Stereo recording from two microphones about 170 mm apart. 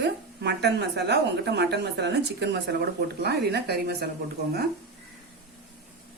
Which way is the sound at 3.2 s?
75° right (ahead or behind).